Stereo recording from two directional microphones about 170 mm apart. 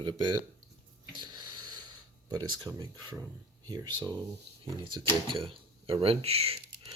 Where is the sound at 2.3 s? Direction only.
25° right (ahead or behind).